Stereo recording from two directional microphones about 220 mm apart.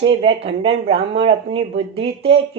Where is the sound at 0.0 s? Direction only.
25° right (ahead or behind).